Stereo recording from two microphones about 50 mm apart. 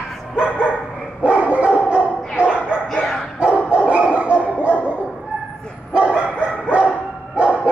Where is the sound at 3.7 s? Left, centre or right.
Right.